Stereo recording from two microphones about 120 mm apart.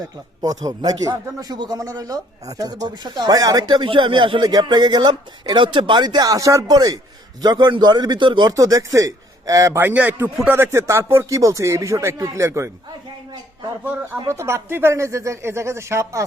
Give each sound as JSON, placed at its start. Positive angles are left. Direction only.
{"t": 0.4, "sound": "speech", "side_deg": -30}
{"t": 8.5, "sound": "a man's voice", "side_deg": -30}
{"t": 9.8, "sound": "speech", "side_deg": -15}
{"t": 13.8, "sound": "speech", "side_deg": -20}